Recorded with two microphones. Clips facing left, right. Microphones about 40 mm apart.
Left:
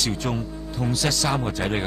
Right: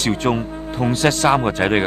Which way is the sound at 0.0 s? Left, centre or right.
Right.